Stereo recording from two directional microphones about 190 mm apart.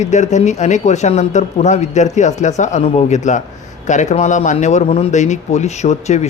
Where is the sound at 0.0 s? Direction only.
40° left (ahead or behind).